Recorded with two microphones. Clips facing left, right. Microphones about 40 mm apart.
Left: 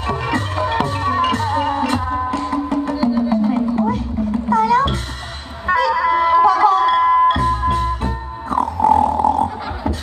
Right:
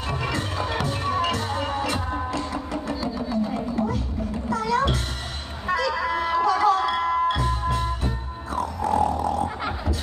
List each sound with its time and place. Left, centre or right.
0.0 s music: left
4.5 s a sound: left
5.7 s music: left